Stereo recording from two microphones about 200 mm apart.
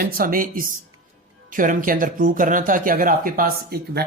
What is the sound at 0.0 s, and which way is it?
Speech, 45° right (ahead or behind).